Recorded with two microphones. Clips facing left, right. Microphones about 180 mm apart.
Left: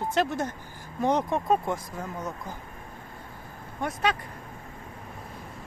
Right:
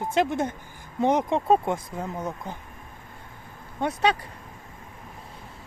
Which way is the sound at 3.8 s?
30° right (ahead or behind).